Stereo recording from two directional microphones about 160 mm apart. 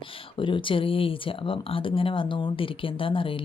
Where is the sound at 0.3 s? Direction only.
30° left (ahead or behind).